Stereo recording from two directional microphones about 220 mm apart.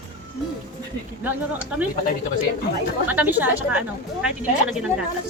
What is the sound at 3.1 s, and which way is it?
A woman's voice, 10° right (ahead or behind).